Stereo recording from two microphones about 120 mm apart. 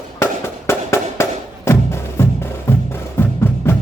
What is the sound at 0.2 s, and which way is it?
Music, 20° left (ahead or behind).